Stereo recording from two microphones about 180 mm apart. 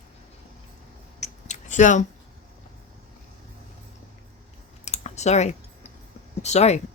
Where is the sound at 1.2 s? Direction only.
40° left (ahead or behind).